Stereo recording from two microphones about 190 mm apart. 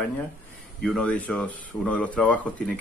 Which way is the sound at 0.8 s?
5° left (ahead or behind).